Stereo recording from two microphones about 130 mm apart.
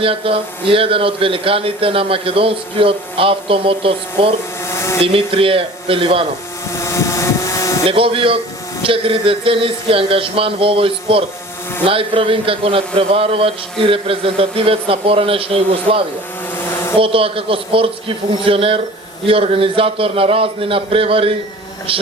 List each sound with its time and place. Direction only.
0.0 s a man's voice: 45° right (ahead or behind)
4.7 s a sound: 20° left (ahead or behind)
5.0 s a man's voice: 45° right (ahead or behind)
6.7 s vehicle: 25° left (ahead or behind)
7.9 s a man's voice: 45° right (ahead or behind)